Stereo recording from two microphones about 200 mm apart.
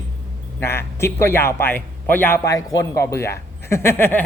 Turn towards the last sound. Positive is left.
turn(degrees=10)  # may be behind; listen again after turning